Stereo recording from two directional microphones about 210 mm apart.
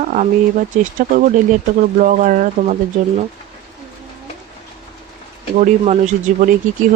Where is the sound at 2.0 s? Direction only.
35° right (ahead or behind).